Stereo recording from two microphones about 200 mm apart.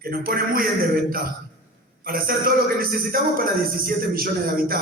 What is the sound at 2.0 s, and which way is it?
A man's voice, 45° right (ahead or behind).